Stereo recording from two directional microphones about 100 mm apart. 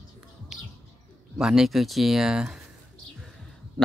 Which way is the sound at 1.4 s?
5° right (ahead or behind).